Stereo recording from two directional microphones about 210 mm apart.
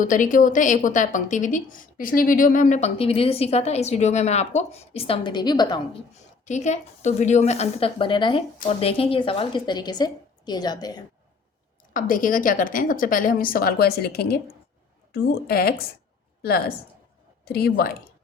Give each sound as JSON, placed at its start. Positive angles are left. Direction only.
{"t": 0.0, "sound": "a woman's voice", "side_deg": 40}
{"t": 6.4, "sound": "a woman's voice", "side_deg": 35}
{"t": 11.9, "sound": "a woman's voice", "side_deg": 40}